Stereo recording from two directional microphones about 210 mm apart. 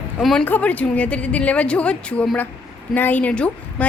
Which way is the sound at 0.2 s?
Centre (ahead or behind).